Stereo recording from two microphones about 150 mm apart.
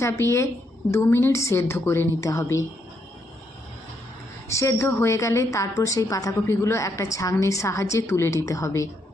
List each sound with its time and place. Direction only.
0.0 s a woman's voice: 20° left (ahead or behind)
4.4 s a woman's voice: 20° left (ahead or behind)